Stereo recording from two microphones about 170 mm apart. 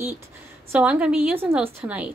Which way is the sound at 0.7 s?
10° right (ahead or behind).